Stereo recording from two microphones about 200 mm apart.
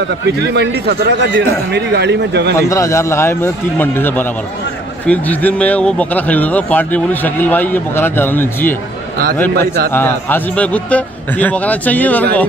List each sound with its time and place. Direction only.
0.5 s a man's voice: 60° right (ahead or behind)
2.7 s speech: 15° left (ahead or behind)
9.9 s speech: 10° left (ahead or behind)